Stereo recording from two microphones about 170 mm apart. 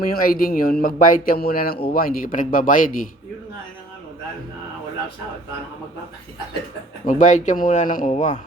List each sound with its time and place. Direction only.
0.1 s speech: 55° left (ahead or behind)
7.0 s speech: 45° left (ahead or behind)